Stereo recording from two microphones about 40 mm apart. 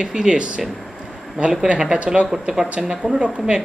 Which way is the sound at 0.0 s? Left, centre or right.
Centre.